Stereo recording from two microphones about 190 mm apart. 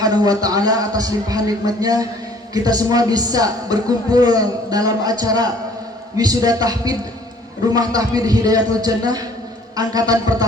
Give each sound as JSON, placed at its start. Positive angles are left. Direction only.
{"t": 0.0, "sound": "a man's voice", "side_deg": -20}